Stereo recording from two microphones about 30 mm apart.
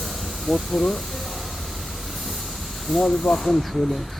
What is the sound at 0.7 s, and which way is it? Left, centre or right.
Speech, centre.